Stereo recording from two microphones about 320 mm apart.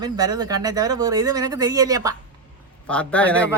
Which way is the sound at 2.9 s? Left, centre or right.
Centre.